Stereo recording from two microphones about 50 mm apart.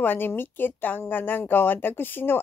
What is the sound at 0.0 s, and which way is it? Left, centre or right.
Speech, left.